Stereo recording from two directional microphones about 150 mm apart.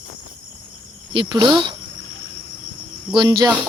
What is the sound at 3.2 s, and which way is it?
Speech, 30° right (ahead or behind).